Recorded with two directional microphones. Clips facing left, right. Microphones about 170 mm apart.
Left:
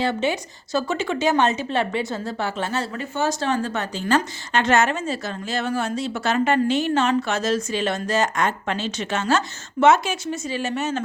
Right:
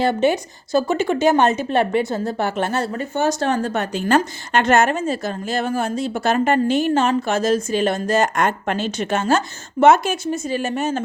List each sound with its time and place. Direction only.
0.0 s a woman's voice: 50° right (ahead or behind)